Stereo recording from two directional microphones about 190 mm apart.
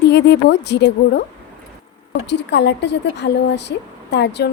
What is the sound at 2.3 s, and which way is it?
Speech, 65° left (ahead or behind).